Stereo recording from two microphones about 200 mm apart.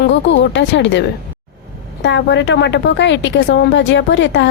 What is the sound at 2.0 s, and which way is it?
A woman's voice, 65° left (ahead or behind).